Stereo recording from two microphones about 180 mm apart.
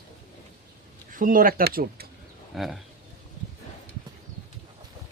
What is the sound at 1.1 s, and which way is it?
Speech, 50° right (ahead or behind).